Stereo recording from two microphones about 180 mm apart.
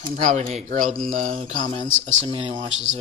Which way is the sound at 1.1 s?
45° right (ahead or behind).